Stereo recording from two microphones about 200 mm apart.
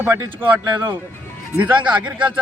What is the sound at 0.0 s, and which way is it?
A man's voice, 10° right (ahead or behind).